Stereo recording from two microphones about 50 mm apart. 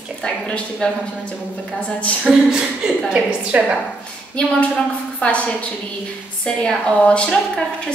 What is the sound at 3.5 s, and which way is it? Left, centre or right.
Speech, right.